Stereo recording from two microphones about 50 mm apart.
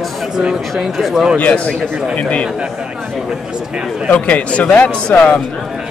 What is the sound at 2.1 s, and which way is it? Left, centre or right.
Speech, left.